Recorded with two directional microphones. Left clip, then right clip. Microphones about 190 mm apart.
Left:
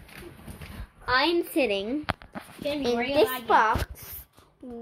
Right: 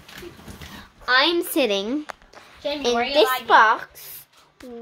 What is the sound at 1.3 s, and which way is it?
Speech, 25° right (ahead or behind).